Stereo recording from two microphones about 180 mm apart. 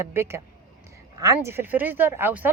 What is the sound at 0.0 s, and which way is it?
Speech, 15° right (ahead or behind).